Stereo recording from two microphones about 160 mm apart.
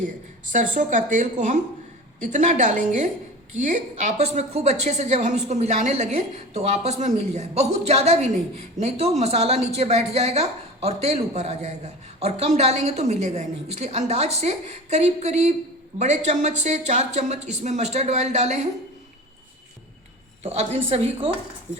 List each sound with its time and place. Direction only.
0.5 s a woman's voice: 50° right (ahead or behind)
20.4 s speech: 40° right (ahead or behind)